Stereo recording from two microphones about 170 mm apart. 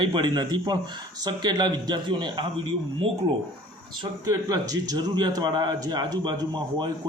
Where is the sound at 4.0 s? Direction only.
20° right (ahead or behind).